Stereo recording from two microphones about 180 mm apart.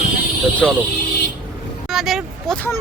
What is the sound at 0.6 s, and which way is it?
Speech, 5° left (ahead or behind).